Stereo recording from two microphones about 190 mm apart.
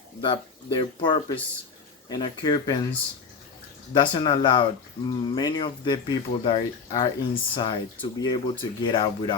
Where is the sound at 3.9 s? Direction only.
25° left (ahead or behind).